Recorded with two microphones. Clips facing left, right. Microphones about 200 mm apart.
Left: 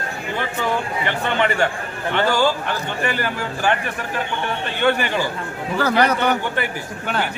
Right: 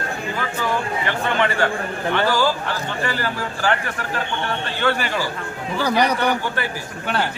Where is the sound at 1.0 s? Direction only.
20° left (ahead or behind).